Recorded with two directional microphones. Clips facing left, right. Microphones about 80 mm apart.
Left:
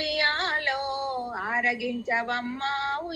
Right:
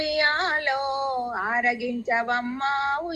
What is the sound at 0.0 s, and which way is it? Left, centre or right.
Female singing, centre.